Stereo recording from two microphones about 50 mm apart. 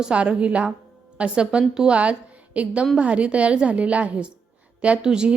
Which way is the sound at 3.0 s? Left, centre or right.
Right.